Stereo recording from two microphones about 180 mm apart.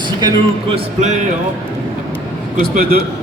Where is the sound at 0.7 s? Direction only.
40° right (ahead or behind).